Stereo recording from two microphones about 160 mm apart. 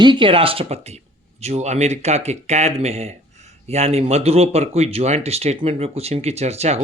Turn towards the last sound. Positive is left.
turn(degrees=-45)  # may be behind; listen again after turning